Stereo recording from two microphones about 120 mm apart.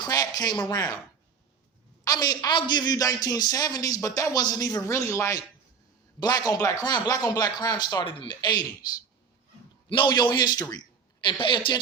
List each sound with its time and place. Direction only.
0.0 s speech: 30° left (ahead or behind)
2.0 s speech: 30° left (ahead or behind)
9.9 s a woman's voice: 40° left (ahead or behind)